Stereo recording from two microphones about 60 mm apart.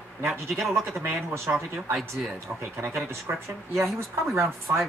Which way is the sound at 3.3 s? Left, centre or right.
Right.